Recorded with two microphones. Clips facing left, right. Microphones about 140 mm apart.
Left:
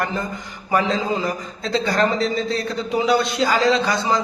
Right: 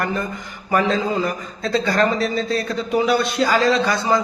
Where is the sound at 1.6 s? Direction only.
25° left (ahead or behind).